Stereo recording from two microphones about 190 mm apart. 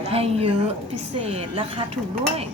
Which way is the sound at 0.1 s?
30° right (ahead or behind).